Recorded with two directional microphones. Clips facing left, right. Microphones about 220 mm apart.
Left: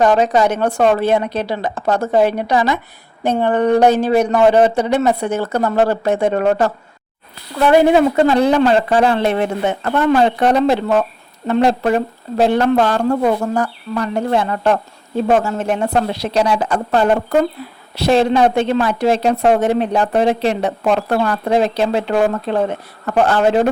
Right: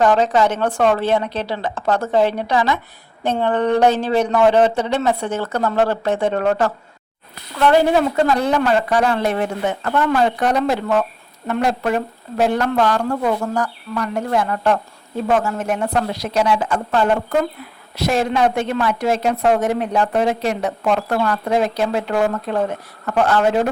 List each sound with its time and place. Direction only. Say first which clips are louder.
0.0 s a woman's voice: left 2 dB; 15° left (ahead or behind)
8.3 s speech: left 4 dB; 30° left (ahead or behind)